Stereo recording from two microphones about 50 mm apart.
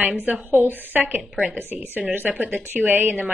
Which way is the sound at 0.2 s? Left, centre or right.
Right.